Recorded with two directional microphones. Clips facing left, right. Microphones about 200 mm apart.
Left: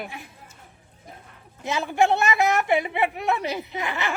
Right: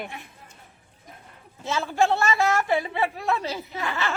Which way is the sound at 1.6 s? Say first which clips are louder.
Left 1 dB; 15° left (ahead or behind).